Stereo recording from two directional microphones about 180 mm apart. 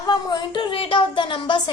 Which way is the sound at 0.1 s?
25° left (ahead or behind).